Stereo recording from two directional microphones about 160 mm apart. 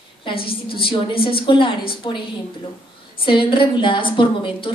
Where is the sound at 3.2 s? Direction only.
30° left (ahead or behind).